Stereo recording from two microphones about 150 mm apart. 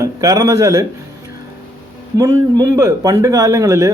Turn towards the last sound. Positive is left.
turn(degrees=-20)  # may be behind; listen again after turning